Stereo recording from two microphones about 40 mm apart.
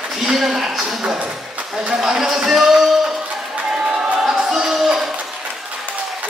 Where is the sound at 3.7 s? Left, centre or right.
Right.